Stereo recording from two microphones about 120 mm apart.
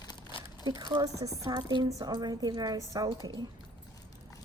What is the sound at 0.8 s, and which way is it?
A woman's voice, 35° right (ahead or behind).